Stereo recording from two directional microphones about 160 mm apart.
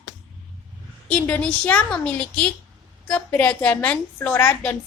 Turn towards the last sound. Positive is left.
turn(degrees=10)  # may be behind; listen again after turning